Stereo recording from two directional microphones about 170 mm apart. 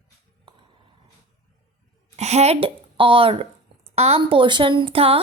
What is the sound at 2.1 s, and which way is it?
A woman's voice, 40° right (ahead or behind).